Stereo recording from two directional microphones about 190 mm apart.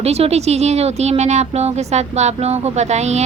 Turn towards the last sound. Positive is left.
turn(degrees=-35)  # may be behind; listen again after turning